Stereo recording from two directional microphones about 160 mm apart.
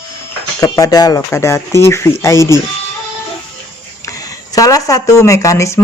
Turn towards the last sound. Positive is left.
turn(degrees=20)  # may be behind; listen again after turning